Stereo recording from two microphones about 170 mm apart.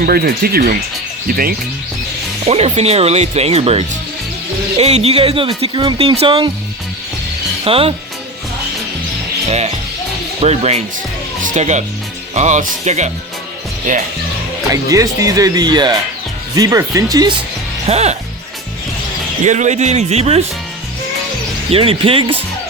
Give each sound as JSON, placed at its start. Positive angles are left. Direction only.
{"t": 0.0, "sound": "speech", "side_deg": -65}
{"t": 2.5, "sound": "speech", "side_deg": -35}
{"t": 7.6, "sound": "speech", "side_deg": -35}
{"t": 9.5, "sound": "speech", "side_deg": -40}
{"t": 14.7, "sound": "speech", "side_deg": -20}
{"t": 17.8, "sound": "speech", "side_deg": -40}
{"t": 19.5, "sound": "speech", "side_deg": -45}
{"t": 21.7, "sound": "speech", "side_deg": -35}